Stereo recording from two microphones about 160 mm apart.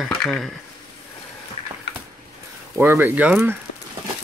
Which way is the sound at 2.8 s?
15° right (ahead or behind).